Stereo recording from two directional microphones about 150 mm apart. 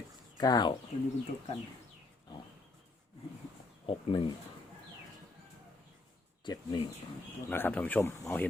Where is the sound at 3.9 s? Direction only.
35° left (ahead or behind).